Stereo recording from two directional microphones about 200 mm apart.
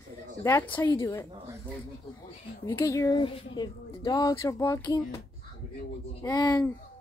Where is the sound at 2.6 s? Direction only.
15° left (ahead or behind).